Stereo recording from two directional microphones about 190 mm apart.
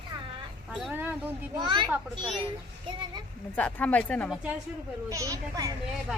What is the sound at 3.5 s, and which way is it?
Speech, 5° left (ahead or behind).